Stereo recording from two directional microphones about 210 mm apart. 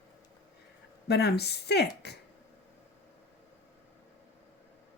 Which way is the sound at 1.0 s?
50° left (ahead or behind).